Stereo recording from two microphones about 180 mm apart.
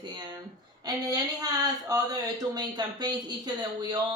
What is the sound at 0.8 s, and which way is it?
Speech, 20° right (ahead or behind).